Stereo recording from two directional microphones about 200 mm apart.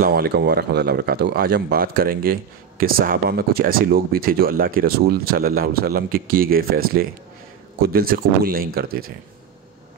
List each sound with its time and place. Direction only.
0.0 s speech: 50° right (ahead or behind)